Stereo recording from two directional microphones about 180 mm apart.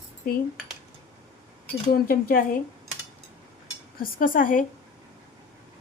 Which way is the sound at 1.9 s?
55° left (ahead or behind).